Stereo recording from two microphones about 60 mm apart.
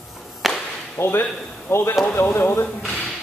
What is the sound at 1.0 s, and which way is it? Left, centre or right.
A man's voice, left.